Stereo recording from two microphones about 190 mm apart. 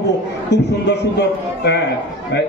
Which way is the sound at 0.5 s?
65° left (ahead or behind).